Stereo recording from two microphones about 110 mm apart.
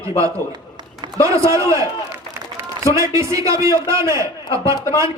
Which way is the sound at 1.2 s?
30° right (ahead or behind).